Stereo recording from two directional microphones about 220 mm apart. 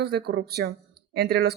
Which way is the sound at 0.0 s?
50° right (ahead or behind).